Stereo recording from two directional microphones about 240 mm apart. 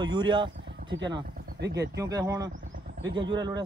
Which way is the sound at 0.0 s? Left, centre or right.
Centre.